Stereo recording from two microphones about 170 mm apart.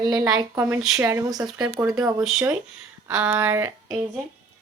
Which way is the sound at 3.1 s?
5° right (ahead or behind).